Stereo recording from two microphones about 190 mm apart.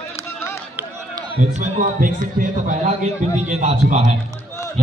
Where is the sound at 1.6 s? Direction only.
40° right (ahead or behind).